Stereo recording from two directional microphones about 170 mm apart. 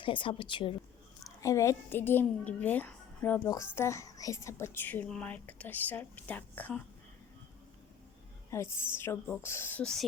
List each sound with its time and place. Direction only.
0.0 s a woman's voice: 30° left (ahead or behind)
1.4 s a woman's voice: 20° left (ahead or behind)
8.4 s a woman's voice: 15° left (ahead or behind)